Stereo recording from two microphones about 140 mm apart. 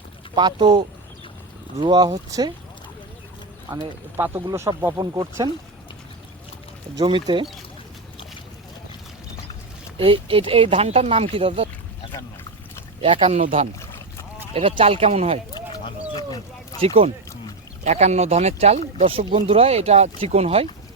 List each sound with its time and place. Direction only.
0.3 s speech: 30° right (ahead or behind)
4.4 s speech: 20° right (ahead or behind)
6.9 s speech: 35° right (ahead or behind)
10.0 s speech: 40° right (ahead or behind)
13.0 s speech: 40° right (ahead or behind)
14.5 s speech: 45° right (ahead or behind)
15.5 s chicken: 30° left (ahead or behind)
16.8 s speech: 45° right (ahead or behind)
17.8 s speech: 55° right (ahead or behind)